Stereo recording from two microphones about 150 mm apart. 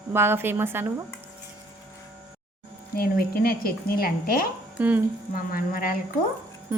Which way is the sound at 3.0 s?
90° left.